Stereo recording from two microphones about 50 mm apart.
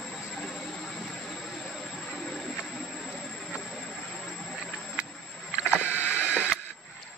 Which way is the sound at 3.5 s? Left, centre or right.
Centre.